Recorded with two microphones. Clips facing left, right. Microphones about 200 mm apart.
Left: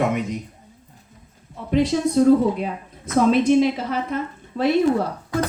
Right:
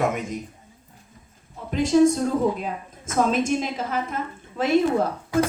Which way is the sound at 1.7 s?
45° right (ahead or behind).